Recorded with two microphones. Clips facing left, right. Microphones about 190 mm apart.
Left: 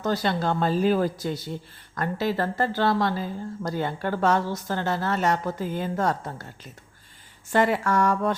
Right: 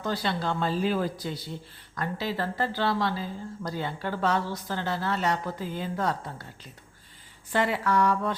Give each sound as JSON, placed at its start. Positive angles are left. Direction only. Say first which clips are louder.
{"t": 0.0, "sound": "a woman's voice", "louder": "left 4 dB", "side_deg": 45}
{"t": 7.5, "sound": "a woman's voice", "louder": "left 3 dB", "side_deg": 50}